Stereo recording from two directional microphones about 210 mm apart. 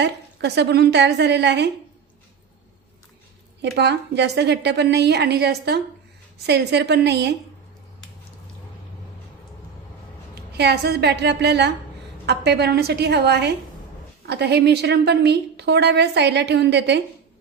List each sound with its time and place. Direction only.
0.0 s a woman's voice: 55° right (ahead or behind)
3.6 s a woman's voice: 55° right (ahead or behind)
10.5 s a woman's voice: 50° right (ahead or behind)